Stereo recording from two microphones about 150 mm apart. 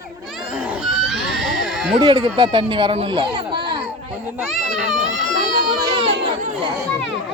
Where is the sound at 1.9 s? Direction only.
30° right (ahead or behind).